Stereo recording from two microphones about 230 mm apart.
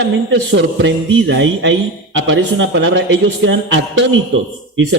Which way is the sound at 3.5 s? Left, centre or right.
Right.